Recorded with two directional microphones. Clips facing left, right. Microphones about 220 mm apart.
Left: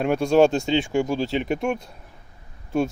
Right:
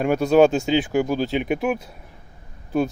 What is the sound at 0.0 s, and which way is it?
Speech, centre (ahead or behind).